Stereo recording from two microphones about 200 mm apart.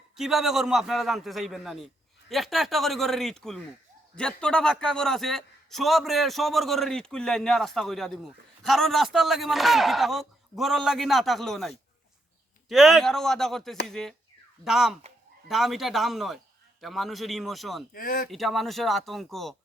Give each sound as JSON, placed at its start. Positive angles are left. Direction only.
{"t": 0.2, "sound": "a man's voice", "side_deg": 0}
{"t": 17.9, "sound": "speech", "side_deg": 45}
{"t": 18.3, "sound": "a man's voice", "side_deg": 0}